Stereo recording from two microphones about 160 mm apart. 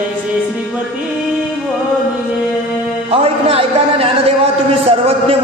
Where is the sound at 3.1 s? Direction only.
35° right (ahead or behind).